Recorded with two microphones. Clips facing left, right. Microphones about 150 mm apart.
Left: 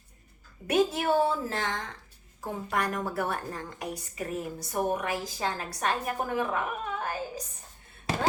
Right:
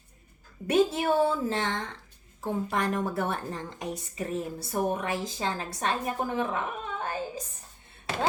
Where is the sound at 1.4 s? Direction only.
25° right (ahead or behind).